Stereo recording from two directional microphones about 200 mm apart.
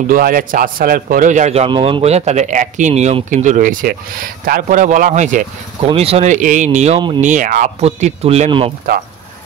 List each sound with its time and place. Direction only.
0.1 s a man's voice: 45° right (ahead or behind); by 8.7 s 25° right (ahead or behind)